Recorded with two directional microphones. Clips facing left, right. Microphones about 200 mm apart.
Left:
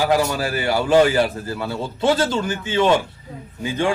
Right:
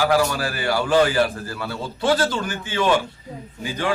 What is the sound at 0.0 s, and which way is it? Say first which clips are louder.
A man's voice: left 1 dB; 20° left (ahead or behind).